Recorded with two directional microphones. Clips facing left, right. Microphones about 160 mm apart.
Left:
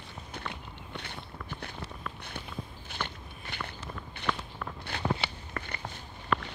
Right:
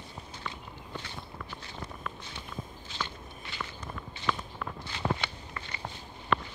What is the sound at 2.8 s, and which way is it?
Walk, 60° left (ahead or behind).